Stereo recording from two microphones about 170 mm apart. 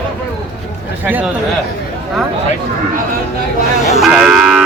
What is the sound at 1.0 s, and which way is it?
Speech, 10° right (ahead or behind).